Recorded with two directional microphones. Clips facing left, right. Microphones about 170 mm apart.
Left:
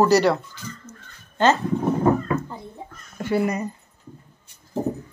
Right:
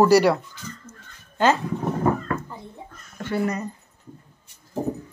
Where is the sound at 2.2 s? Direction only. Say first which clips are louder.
Left 3 dB; 10° left (ahead or behind).